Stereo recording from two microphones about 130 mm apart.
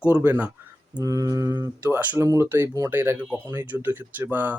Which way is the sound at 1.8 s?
15° right (ahead or behind).